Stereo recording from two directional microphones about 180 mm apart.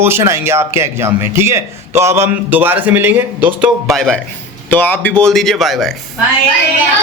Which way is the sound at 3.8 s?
Centre (ahead or behind).